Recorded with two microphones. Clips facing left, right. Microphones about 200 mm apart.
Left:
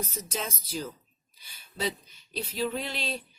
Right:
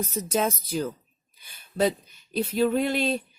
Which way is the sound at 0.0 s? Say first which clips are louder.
Right 9 dB; 50° right (ahead or behind).